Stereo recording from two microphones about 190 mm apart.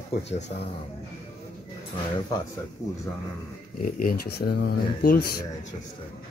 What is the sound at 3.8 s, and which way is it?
Speech, 50° left (ahead or behind).